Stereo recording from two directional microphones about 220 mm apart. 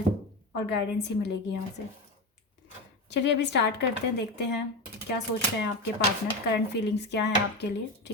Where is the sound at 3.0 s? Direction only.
50° left (ahead or behind).